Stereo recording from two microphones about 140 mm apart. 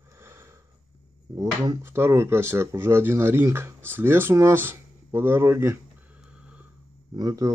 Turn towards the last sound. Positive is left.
turn(degrees=-25)  # may be behind; listen again after turning